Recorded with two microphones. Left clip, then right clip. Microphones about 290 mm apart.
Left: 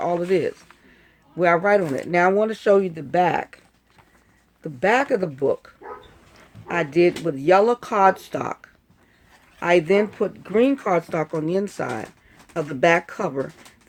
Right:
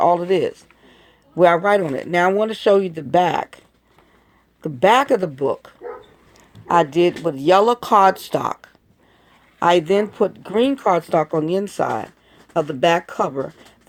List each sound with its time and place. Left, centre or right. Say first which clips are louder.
0.0 s speech: right 5 dB; right
4.6 s speech: right 5 dB; right